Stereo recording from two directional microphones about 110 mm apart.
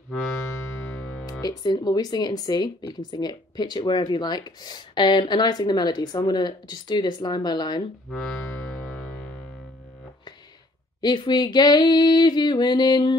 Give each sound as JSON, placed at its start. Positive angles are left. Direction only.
{"t": 1.4, "sound": "speech", "side_deg": 35}
{"t": 8.1, "sound": "music", "side_deg": 5}
{"t": 11.0, "sound": "speech", "side_deg": 40}